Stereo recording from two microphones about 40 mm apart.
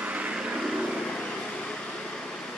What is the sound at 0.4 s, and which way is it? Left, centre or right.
Vehicle, centre.